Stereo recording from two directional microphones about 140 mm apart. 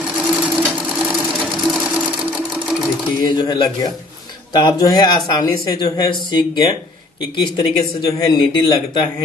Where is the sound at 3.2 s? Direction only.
30° left (ahead or behind).